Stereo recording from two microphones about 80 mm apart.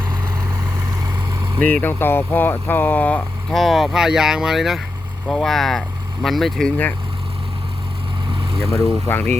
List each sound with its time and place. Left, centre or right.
1.5 s speech: left
3.5 s speech: centre
6.7 s speech: centre
8.7 s speech: left